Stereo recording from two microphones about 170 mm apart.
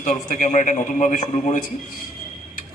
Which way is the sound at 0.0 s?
50° left (ahead or behind).